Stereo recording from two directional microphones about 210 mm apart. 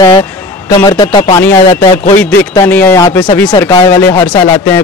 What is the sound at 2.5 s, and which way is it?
A man's voice, 10° left (ahead or behind).